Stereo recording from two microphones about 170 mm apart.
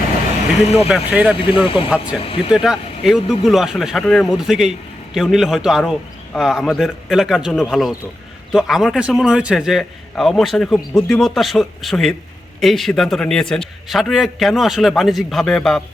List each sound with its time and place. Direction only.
0.9 s speech: 5° right (ahead or behind)
1.6 s speech: 30° left (ahead or behind)
2.5 s a man's voice: 5° right (ahead or behind)